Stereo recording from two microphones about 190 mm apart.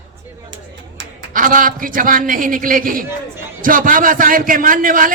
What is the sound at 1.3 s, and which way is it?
A man's voice, 45° right (ahead or behind).